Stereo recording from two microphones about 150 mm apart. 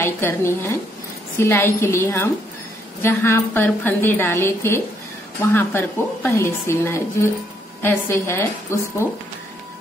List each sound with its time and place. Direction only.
0.0 s a woman's voice: 15° left (ahead or behind)